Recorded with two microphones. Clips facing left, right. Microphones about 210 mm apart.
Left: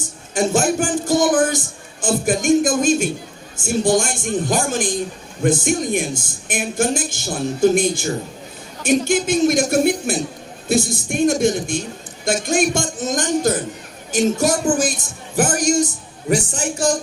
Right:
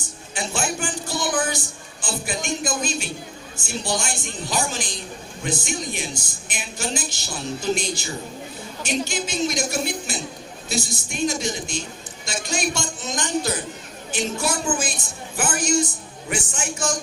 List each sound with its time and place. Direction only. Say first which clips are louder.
0.3 s a man's voice: left 10 dB; 45° left (ahead or behind)